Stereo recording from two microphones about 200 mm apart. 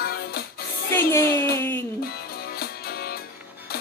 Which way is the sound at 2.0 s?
50° left (ahead or behind).